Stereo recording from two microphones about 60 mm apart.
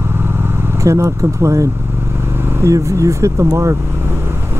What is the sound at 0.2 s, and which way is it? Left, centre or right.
Vehicle, right.